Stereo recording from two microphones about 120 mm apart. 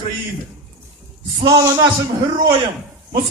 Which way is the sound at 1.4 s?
35° right (ahead or behind).